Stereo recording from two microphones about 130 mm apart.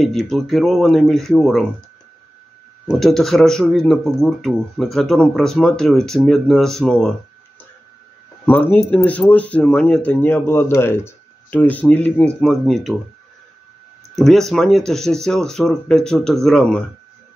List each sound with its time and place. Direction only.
0.0 s speech: centre (ahead or behind)
2.9 s speech: centre (ahead or behind)
8.5 s speech: 15° left (ahead or behind)
10.2 s speech: 20° left (ahead or behind)
12.4 s speech: centre (ahead or behind)
14.1 s speech: centre (ahead or behind)